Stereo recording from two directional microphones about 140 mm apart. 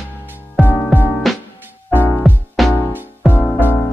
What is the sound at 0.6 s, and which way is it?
Music, 15° right (ahead or behind).